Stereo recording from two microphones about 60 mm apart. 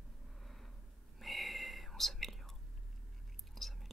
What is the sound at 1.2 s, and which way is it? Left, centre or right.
Whispering, centre.